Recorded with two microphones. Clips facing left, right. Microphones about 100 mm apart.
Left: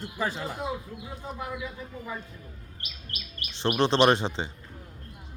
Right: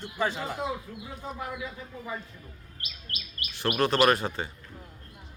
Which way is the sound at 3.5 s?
25° left (ahead or behind).